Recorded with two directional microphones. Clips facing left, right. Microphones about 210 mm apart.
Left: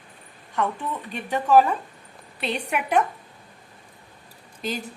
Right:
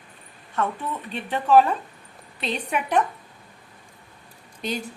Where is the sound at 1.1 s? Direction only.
10° left (ahead or behind).